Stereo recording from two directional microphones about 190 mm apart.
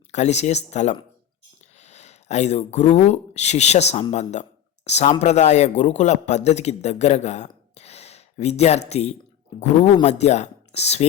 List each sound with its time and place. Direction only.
0.1 s a man's voice: 35° left (ahead or behind)